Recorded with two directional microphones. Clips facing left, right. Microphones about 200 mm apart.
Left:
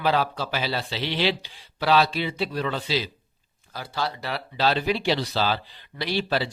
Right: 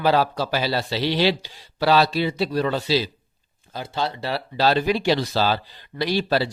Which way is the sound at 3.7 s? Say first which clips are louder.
Right 3 dB; 25° right (ahead or behind).